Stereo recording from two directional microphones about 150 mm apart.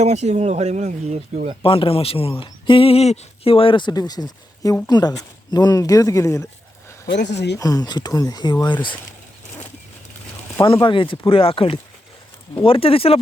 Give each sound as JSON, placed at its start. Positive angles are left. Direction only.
{"t": 0.0, "sound": "speech", "side_deg": -50}
{"t": 1.6, "sound": "speech", "side_deg": 35}
{"t": 7.6, "sound": "speech", "side_deg": 25}
{"t": 10.6, "sound": "speech", "side_deg": 30}